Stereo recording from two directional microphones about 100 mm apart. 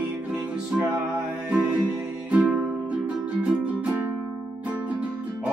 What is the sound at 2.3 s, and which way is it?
Music, 15° right (ahead or behind).